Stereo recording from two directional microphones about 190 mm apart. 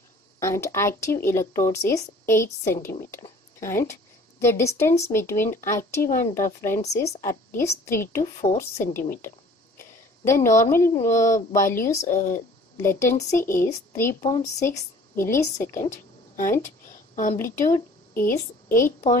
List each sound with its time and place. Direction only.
0.4 s a woman's voice: 15° left (ahead or behind)
8.8 s speech: 45° left (ahead or behind)
9.8 s a sound: 15° left (ahead or behind)
10.6 s speech: 15° left (ahead or behind)
17.1 s a woman's voice: 40° left (ahead or behind)
17.4 s speech: 15° left (ahead or behind)